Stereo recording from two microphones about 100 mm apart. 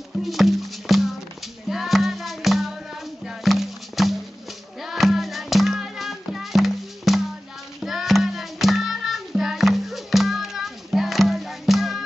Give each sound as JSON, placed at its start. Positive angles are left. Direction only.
{"t": 0.2, "sound": "music", "side_deg": 0}